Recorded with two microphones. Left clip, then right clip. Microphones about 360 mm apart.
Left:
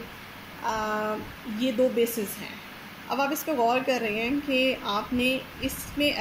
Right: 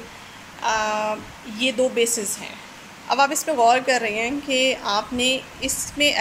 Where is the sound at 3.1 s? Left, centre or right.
Right.